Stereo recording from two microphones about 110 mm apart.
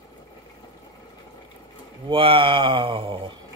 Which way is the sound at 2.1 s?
55° right (ahead or behind).